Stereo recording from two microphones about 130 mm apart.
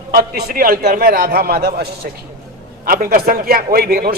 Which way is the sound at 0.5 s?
90° right.